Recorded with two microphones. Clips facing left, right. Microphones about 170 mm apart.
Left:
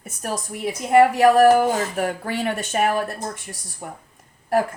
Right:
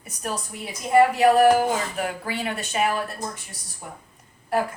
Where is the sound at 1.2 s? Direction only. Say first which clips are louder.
Left 3 dB; 45° left (ahead or behind).